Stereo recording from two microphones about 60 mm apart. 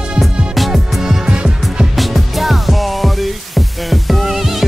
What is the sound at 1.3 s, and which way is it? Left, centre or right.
Music, centre.